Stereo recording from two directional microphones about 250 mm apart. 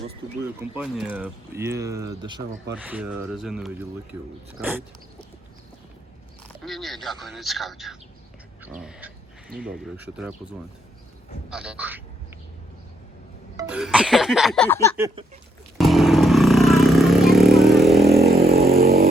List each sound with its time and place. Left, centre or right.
0.6 s speech: centre
2.7 s music: centre
6.6 s music: centre
8.8 s speech: centre
9.5 s speech: right
9.8 s music: centre
11.5 s music: centre
13.6 s music: centre
15.8 s vehicle: centre
18.1 s vehicle: right
18.3 s vehicle: right
18.6 s vehicle: right